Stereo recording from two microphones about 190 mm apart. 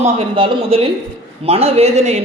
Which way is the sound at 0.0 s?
30° right (ahead or behind).